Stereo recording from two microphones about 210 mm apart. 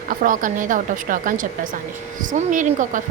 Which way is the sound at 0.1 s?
40° right (ahead or behind).